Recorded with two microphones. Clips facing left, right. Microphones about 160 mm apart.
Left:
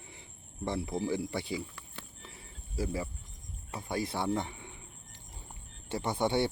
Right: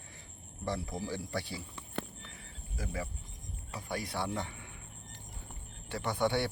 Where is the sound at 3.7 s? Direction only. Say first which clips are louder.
Left 3 dB; 25° left (ahead or behind).